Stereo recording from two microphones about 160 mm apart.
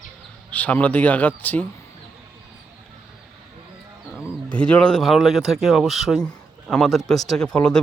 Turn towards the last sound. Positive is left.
turn(degrees=5)  # may be behind; listen again after turning